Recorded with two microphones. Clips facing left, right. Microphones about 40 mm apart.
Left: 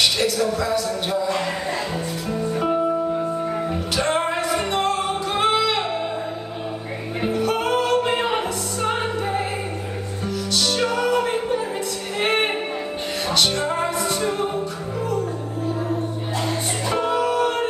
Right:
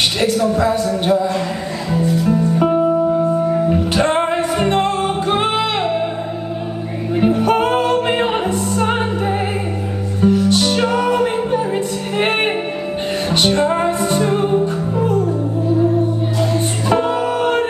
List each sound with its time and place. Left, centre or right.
0.2 s speech: right
3.9 s music: right
7.3 s music: right
17.0 s music: right